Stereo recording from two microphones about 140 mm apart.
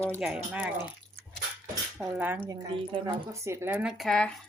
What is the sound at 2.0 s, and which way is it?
Speech, 10° right (ahead or behind).